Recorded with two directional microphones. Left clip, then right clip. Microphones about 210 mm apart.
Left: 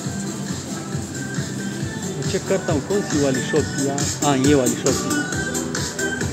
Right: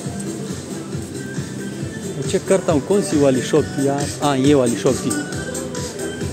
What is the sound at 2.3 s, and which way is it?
Speech, 35° right (ahead or behind).